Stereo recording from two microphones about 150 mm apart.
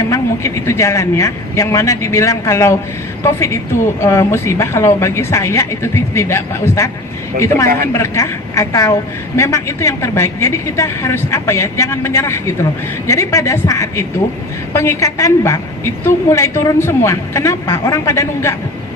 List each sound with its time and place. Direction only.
0.1 s a woman's voice: 20° left (ahead or behind)